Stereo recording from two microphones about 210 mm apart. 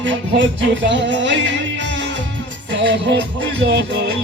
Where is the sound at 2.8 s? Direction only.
55° right (ahead or behind).